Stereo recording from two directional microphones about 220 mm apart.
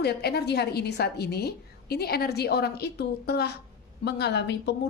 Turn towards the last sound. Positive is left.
turn(degrees=50)  # may be behind; listen again after turning